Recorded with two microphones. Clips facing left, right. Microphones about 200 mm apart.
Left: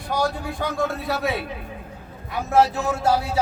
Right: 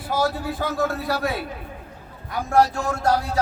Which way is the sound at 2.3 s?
Centre (ahead or behind).